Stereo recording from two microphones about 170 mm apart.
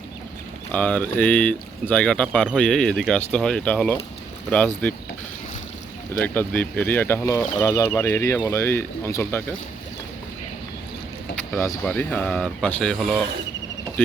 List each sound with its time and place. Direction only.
0.7 s speech: 10° left (ahead or behind)
6.1 s speech: 10° left (ahead or behind)
11.9 s speech: 10° left (ahead or behind)